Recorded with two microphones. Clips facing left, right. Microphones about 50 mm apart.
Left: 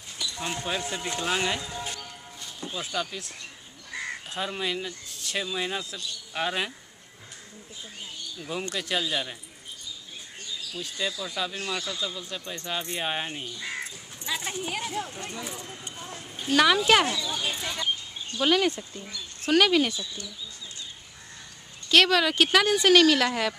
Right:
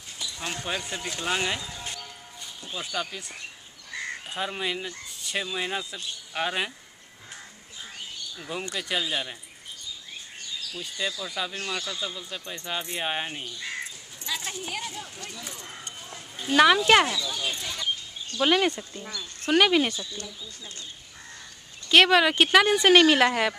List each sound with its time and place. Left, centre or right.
0.5 s speech: centre
2.7 s speech: centre
3.9 s crow: centre
4.4 s speech: centre
8.5 s speech: centre
10.8 s speech: centre
13.6 s crow: centre
14.2 s speech: centre
15.0 s speech: left
15.4 s speech: centre
16.4 s speech: centre
17.1 s speech: centre
18.4 s speech: centre
21.8 s speech: centre